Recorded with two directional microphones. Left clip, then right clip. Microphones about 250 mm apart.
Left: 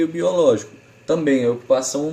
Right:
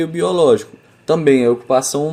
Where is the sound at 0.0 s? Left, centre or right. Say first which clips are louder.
Right 2 dB; right.